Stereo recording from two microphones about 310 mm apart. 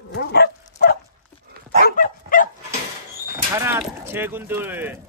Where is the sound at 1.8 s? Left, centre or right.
Left.